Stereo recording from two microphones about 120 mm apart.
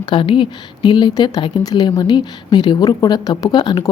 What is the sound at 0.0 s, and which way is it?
Speech, 45° left (ahead or behind).